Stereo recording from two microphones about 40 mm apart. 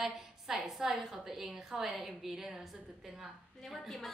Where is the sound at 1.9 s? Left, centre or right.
Centre.